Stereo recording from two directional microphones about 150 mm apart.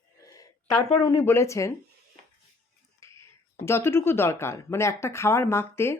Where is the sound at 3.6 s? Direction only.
15° left (ahead or behind).